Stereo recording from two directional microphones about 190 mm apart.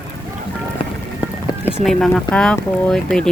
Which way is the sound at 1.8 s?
Centre (ahead or behind).